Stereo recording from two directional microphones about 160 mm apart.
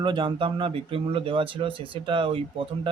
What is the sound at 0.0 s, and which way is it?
Speech, 30° right (ahead or behind).